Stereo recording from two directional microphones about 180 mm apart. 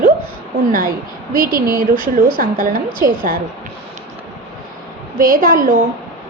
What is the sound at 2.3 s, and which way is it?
Speech, 45° right (ahead or behind).